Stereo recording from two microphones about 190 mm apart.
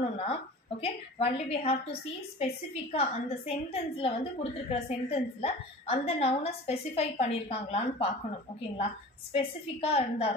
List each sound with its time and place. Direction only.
0.2 s a woman's voice: 35° left (ahead or behind)
9.3 s a woman's voice: 30° left (ahead or behind)